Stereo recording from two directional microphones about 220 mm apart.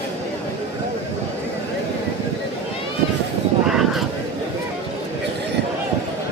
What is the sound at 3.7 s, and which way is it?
Vehicle, centre (ahead or behind).